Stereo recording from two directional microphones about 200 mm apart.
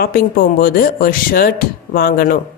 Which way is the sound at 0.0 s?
50° left (ahead or behind).